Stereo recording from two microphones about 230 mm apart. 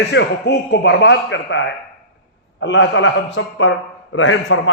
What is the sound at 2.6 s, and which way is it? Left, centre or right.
A man's voice, left.